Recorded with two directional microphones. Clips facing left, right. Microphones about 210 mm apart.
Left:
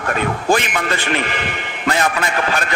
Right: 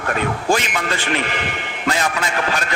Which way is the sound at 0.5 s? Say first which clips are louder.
Left 3 dB; 55° left (ahead or behind).